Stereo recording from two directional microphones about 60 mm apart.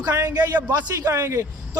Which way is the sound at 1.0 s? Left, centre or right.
Right.